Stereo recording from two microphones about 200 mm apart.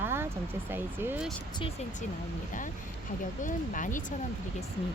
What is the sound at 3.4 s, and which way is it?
Speech, 40° left (ahead or behind).